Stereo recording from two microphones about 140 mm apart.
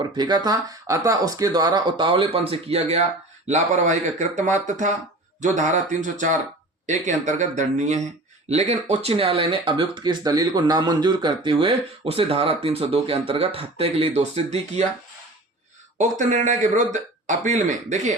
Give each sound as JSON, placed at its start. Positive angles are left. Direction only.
{"t": 0.2, "sound": "speech", "side_deg": -30}
{"t": 3.5, "sound": "a man's voice", "side_deg": -60}
{"t": 16.0, "sound": "a man's voice", "side_deg": -60}